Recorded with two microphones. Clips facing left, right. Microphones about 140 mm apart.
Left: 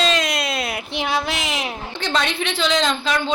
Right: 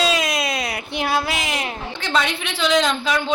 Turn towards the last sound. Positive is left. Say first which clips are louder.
# right 1 dB
turn(degrees=-5)  # may be behind; listen again after turning